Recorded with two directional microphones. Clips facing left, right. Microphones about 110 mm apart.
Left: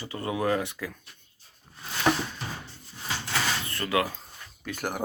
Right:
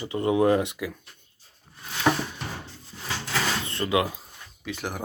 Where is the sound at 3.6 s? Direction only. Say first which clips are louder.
Right 2 dB; 20° right (ahead or behind).